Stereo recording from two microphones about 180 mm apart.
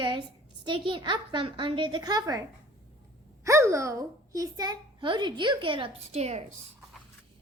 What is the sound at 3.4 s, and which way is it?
A child's voice, 15° right (ahead or behind).